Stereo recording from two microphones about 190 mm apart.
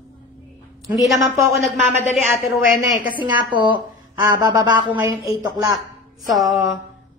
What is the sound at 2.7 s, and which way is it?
Speech, 45° left (ahead or behind).